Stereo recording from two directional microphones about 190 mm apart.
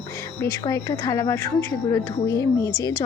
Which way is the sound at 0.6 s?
20° left (ahead or behind).